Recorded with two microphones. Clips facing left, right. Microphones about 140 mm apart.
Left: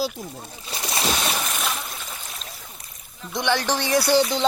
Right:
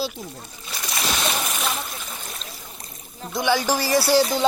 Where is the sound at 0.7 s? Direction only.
25° left (ahead or behind).